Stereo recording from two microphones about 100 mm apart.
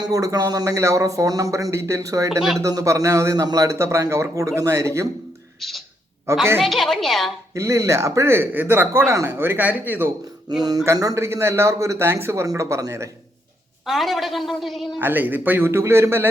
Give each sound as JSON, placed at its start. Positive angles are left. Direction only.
{"t": 0.0, "sound": "a man's voice", "side_deg": -35}
{"t": 5.5, "sound": "a woman's voice", "side_deg": 0}
{"t": 7.5, "sound": "a man's voice", "side_deg": -30}
{"t": 10.5, "sound": "a man's voice", "side_deg": -40}
{"t": 13.8, "sound": "a woman's voice", "side_deg": 0}
{"t": 14.9, "sound": "a man's voice", "side_deg": -20}